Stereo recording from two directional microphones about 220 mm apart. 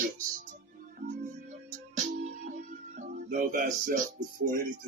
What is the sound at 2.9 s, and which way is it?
Speech, 35° right (ahead or behind).